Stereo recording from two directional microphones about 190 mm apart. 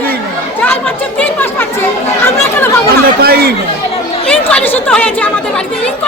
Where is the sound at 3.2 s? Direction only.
55° right (ahead or behind).